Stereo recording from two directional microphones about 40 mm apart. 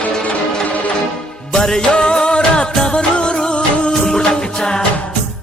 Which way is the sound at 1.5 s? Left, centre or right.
Centre.